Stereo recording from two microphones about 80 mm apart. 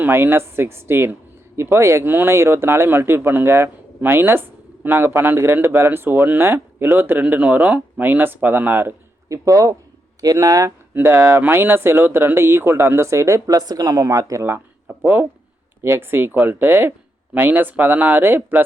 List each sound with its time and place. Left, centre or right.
0.0 s speech: right
9.3 s speech: right
10.9 s speech: right
14.8 s speech: right